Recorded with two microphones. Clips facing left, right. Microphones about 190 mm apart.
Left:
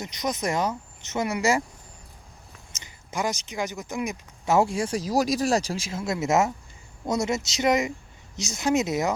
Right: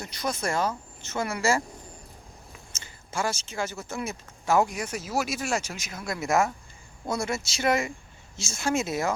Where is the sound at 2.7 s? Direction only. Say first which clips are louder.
Left 4 dB; 15° left (ahead or behind).